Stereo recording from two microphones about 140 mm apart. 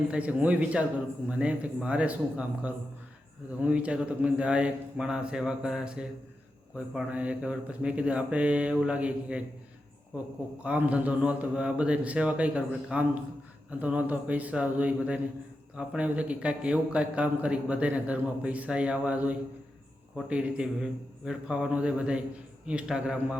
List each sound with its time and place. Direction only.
0.1 s a man's voice: 10° right (ahead or behind)
10.6 s a man's voice: 10° right (ahead or behind)